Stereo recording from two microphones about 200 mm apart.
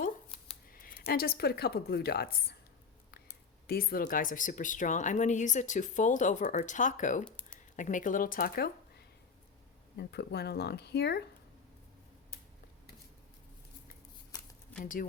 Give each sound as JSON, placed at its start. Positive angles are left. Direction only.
{"t": 0.7, "sound": "speech", "side_deg": 45}
{"t": 3.7, "sound": "speech", "side_deg": 50}
{"t": 7.3, "sound": "a sound", "side_deg": 5}
{"t": 7.8, "sound": "speech", "side_deg": 40}
{"t": 10.0, "sound": "speech", "side_deg": 55}